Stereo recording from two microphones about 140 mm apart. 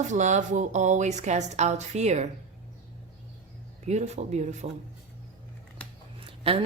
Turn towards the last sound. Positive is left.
turn(degrees=-45)  # may be behind; listen again after turning